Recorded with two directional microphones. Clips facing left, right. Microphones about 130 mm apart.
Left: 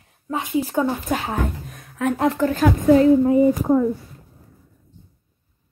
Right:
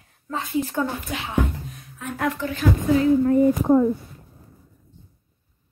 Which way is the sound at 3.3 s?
5° left (ahead or behind).